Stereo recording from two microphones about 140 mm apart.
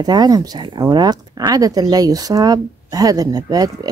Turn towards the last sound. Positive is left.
turn(degrees=-30)  # may be behind; listen again after turning